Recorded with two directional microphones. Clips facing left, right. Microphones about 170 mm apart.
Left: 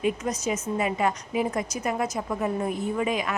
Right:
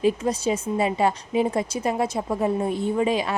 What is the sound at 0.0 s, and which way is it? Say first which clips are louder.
A woman's voice: right 5 dB; 30° right (ahead or behind).